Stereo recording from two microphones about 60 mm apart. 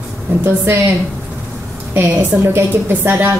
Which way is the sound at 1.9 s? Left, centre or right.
Right.